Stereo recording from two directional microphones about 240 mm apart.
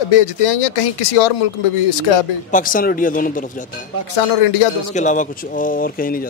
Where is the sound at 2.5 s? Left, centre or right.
Left.